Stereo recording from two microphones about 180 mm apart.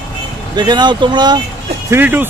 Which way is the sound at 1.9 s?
10° right (ahead or behind).